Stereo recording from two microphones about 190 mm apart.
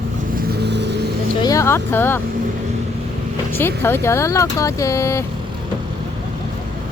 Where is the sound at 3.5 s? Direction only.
10° left (ahead or behind).